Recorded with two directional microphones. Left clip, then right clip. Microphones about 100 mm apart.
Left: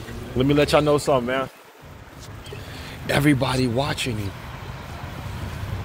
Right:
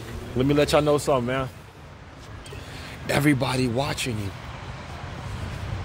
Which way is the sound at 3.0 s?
35° right (ahead or behind).